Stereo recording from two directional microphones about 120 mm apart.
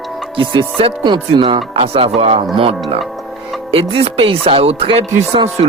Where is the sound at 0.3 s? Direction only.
45° right (ahead or behind).